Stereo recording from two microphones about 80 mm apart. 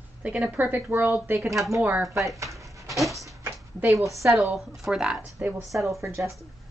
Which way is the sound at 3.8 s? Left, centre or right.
Right.